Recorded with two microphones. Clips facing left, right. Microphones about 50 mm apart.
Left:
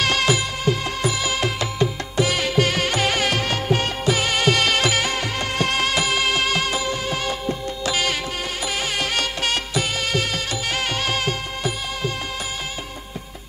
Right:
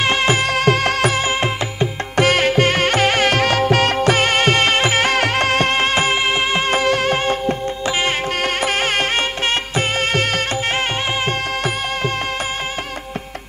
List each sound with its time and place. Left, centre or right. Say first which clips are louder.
0.0 s music: right 3 dB; right
0.4 s music: right 7 dB; right
1.2 s music: right 4 dB; right
2.1 s music: right 6 dB; right
3.4 s music: right 7 dB; right
5.0 s music: right 8 dB; right
5.7 s music: right 4 dB; right
6.7 s music: right 8 dB; right
7.2 s music: right 6 dB; right
7.8 s music: right 2 dB; right
8.4 s music: right 7 dB; right
9.1 s music: right 4 dB; right
10.7 s music: right 3 dB; right